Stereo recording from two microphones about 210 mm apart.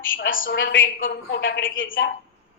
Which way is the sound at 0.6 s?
70° left (ahead or behind).